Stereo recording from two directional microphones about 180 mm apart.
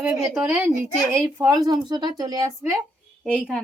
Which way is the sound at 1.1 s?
20° right (ahead or behind).